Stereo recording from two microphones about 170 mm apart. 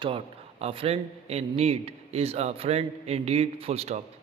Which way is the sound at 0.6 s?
35° right (ahead or behind).